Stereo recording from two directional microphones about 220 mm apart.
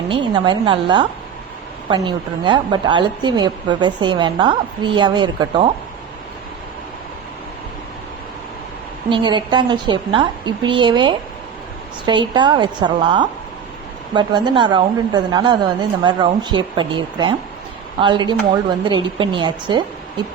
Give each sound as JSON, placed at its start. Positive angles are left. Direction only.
{"t": 0.1, "sound": "a woman's voice", "side_deg": -20}
{"t": 9.0, "sound": "a woman's voice", "side_deg": -20}